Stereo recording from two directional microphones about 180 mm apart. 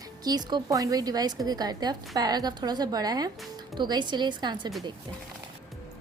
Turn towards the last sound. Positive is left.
turn(degrees=-25)  # may be behind; listen again after turning